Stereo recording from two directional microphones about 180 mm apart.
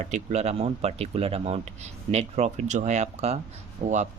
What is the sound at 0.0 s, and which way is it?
Speech, 40° right (ahead or behind).